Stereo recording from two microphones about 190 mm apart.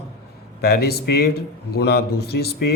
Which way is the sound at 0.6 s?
55° left (ahead or behind).